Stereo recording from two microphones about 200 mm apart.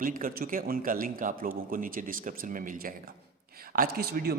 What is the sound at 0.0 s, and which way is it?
A man's voice, 45° right (ahead or behind).